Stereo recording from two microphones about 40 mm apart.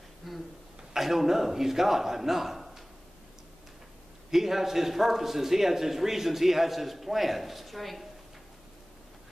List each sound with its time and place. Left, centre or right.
0.2 s a sound: centre
0.9 s a man's voice: centre
4.3 s a man's voice: centre